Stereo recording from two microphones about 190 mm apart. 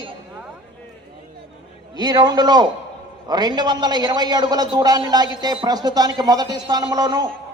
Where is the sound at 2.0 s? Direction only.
20° right (ahead or behind).